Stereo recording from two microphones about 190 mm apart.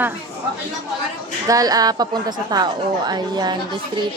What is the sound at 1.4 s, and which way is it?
Speech, 20° right (ahead or behind).